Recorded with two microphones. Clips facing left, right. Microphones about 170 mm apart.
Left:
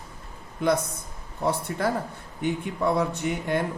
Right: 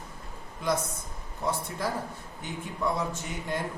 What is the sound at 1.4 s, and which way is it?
Speech, 65° left (ahead or behind).